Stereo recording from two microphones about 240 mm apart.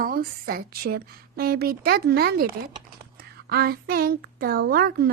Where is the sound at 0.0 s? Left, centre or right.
Right.